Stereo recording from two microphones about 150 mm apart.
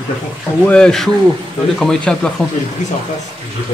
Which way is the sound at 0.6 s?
5° left (ahead or behind).